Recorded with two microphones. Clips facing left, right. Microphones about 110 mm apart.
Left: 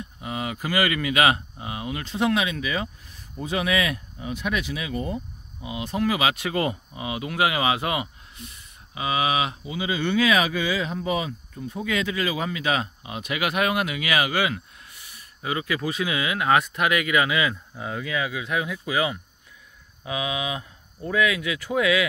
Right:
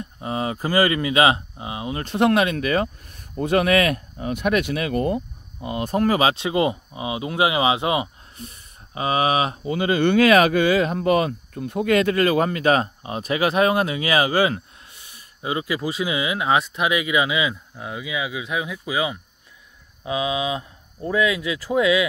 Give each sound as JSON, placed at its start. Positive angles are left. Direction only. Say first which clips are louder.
{"t": 0.0, "sound": "speech", "louder": "right 5 dB", "side_deg": -35}
{"t": 2.0, "sound": "speech", "louder": "right 6 dB", "side_deg": -60}
{"t": 6.3, "sound": "speech", "louder": "right 5 dB", "side_deg": -20}
{"t": 8.4, "sound": "speech", "louder": "right 4 dB", "side_deg": -40}
{"t": 9.8, "sound": "speech", "louder": "right 6 dB", "side_deg": -60}
{"t": 17.7, "sound": "speech", "louder": "even", "side_deg": -5}